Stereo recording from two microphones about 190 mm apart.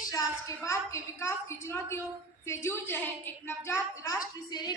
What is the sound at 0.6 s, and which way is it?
A woman's voice, 15° left (ahead or behind).